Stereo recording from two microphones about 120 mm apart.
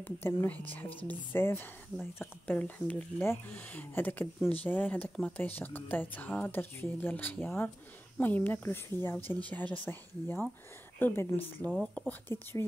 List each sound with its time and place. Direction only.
0.0 s speech: 15° left (ahead or behind)